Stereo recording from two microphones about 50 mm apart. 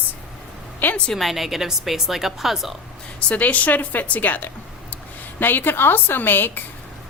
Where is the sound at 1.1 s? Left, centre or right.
Centre.